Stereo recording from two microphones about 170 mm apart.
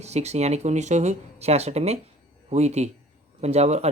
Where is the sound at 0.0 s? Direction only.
40° right (ahead or behind).